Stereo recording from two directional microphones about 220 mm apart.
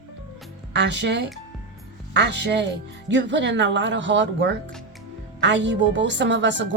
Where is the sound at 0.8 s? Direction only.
50° right (ahead or behind).